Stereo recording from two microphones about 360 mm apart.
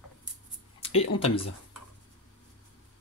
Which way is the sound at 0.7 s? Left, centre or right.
Centre.